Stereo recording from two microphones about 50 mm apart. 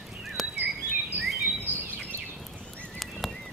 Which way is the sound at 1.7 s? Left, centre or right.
Right.